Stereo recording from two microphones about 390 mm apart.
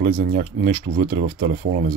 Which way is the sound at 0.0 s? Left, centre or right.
Centre.